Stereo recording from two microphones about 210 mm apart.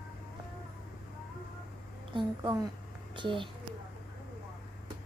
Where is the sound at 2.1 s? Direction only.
20° right (ahead or behind).